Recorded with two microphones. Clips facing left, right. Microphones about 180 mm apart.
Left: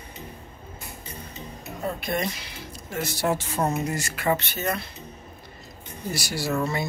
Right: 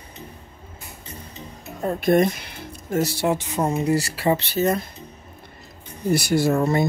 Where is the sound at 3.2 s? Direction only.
15° right (ahead or behind).